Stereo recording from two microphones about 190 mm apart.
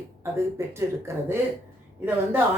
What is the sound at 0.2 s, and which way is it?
Speech, 15° right (ahead or behind).